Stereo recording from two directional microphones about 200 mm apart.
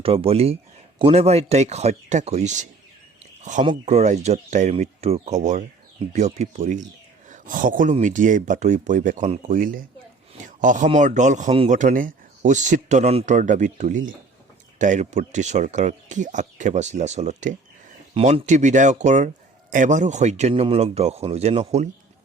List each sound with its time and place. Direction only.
0.0 s speech: 30° right (ahead or behind)